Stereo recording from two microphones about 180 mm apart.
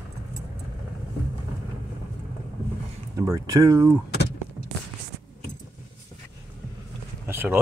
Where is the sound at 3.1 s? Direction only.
20° right (ahead or behind).